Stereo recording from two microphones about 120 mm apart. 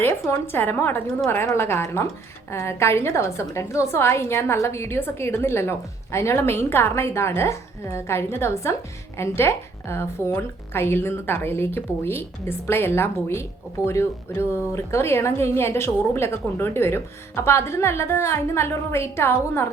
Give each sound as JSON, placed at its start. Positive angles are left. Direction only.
{"t": 0.0, "sound": "a woman's voice", "side_deg": 20}